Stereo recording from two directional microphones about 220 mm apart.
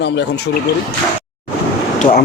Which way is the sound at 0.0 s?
50° left (ahead or behind).